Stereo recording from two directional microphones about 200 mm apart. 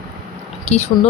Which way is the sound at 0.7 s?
35° left (ahead or behind).